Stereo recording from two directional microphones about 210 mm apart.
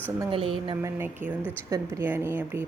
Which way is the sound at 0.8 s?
10° right (ahead or behind).